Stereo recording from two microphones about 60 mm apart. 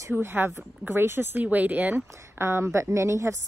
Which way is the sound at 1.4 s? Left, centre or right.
Right.